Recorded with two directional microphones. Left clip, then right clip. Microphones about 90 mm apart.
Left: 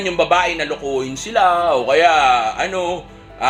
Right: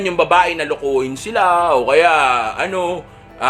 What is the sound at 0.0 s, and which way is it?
Speech, 45° right (ahead or behind).